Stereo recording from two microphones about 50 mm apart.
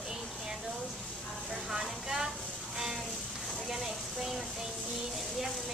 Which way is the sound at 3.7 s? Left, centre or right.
Centre.